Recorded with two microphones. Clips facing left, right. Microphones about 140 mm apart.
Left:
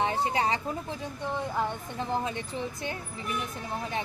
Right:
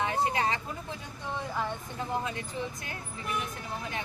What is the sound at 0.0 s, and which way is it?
Speech, 30° left (ahead or behind).